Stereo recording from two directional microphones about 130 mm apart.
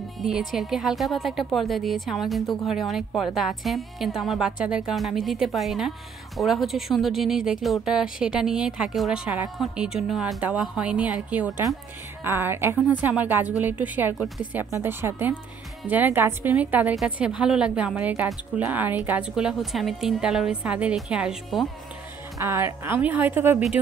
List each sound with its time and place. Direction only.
0.2 s a woman's voice: centre (ahead or behind)
22.4 s a woman's voice: 20° right (ahead or behind)